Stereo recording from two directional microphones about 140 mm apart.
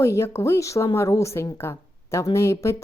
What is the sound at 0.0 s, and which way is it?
A woman's voice, 20° left (ahead or behind).